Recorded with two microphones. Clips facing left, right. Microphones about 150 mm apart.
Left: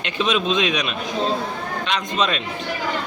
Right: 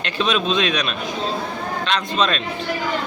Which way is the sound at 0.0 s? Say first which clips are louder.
Even; 15° left (ahead or behind).